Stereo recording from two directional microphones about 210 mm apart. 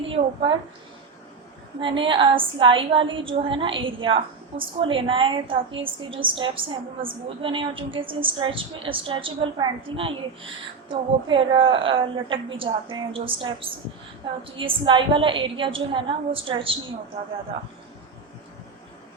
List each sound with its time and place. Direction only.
1.8 s a woman's voice: 25° right (ahead or behind)